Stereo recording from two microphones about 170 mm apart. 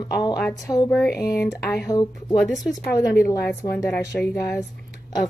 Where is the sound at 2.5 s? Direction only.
Centre (ahead or behind).